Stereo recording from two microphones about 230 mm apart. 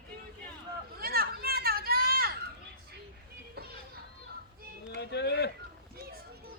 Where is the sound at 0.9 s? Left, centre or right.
Right.